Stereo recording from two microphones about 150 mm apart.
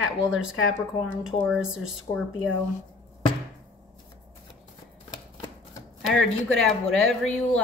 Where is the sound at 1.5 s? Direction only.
5° right (ahead or behind).